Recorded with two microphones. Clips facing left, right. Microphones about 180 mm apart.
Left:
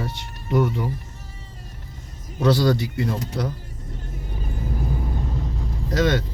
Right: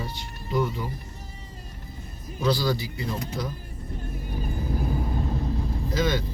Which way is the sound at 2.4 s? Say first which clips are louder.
Left 6 dB; 70° left (ahead or behind).